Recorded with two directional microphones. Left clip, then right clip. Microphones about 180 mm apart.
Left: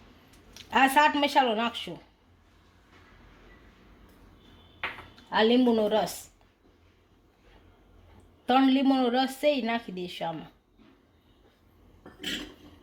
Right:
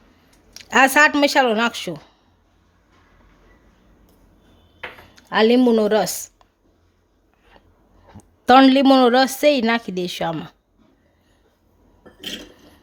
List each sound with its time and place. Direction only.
0.5 s speech: 50° right (ahead or behind)
5.4 s speech: 60° right (ahead or behind)
8.4 s a woman's voice: 50° right (ahead or behind)